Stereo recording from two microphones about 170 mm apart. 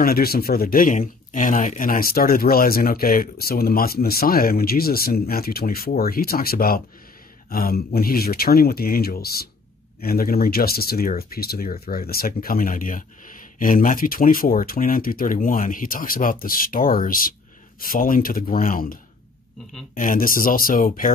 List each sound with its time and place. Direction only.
0.0 s speech: 60° left (ahead or behind)